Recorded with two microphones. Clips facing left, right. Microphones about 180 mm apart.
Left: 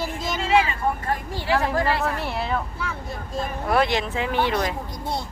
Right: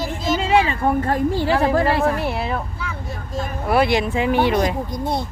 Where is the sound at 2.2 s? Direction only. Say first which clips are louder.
Right 4 dB; centre (ahead or behind).